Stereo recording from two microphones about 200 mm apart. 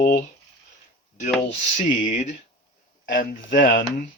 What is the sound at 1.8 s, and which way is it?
Speech, 40° left (ahead or behind).